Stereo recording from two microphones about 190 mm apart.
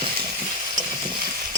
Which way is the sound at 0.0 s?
25° right (ahead or behind).